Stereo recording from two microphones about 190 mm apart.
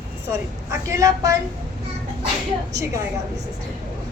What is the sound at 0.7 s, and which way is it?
Speech, 15° right (ahead or behind).